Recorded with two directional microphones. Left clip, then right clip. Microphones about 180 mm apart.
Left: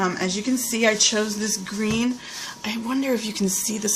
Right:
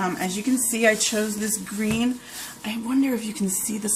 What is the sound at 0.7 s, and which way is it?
Speech, 40° left (ahead or behind).